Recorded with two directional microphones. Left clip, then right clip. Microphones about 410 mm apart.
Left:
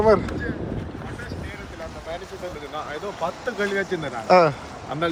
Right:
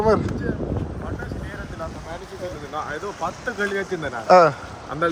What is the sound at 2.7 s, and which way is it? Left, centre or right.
Speech, centre.